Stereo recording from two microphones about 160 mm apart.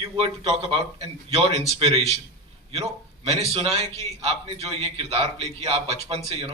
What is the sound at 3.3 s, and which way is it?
A man's voice, 40° right (ahead or behind).